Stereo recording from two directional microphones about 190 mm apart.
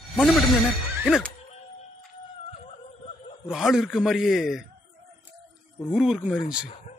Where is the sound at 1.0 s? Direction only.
5° left (ahead or behind).